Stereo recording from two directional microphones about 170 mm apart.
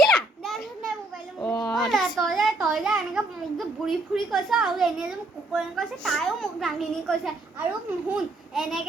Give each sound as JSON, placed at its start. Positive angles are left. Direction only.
{"t": 0.0, "sound": "children playing", "side_deg": 0}
{"t": 1.4, "sound": "a sound", "side_deg": 5}
{"t": 1.9, "sound": "a child's voice", "side_deg": 0}